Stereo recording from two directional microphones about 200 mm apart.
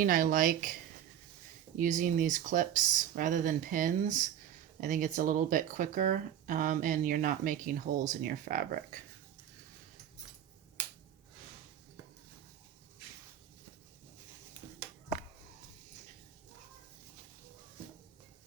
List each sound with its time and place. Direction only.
0.0 s speech: 45° right (ahead or behind)
1.8 s speech: 40° right (ahead or behind)